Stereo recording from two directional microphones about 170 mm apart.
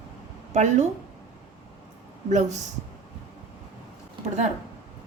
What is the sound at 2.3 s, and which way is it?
Speech, 45° right (ahead or behind).